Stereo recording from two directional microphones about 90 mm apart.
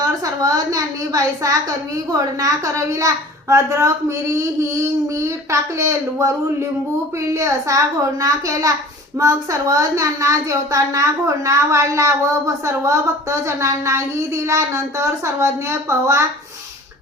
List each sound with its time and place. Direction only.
0.0 s speech: 40° right (ahead or behind)